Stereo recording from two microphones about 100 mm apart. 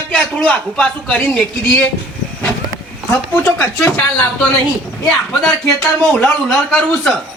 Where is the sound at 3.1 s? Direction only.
15° left (ahead or behind).